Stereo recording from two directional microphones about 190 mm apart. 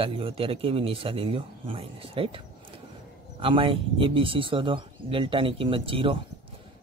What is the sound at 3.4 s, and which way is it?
A man's voice, 25° right (ahead or behind).